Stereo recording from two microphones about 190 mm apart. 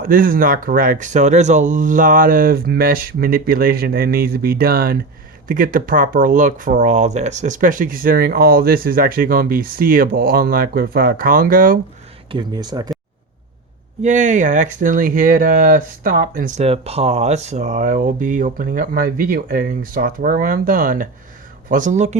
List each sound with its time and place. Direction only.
0.0 s speech: 45° right (ahead or behind)
12.3 s speech: 20° right (ahead or behind)
14.0 s speech: 40° right (ahead or behind)